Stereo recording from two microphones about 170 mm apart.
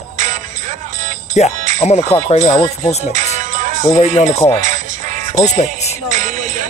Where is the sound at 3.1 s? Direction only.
45° right (ahead or behind).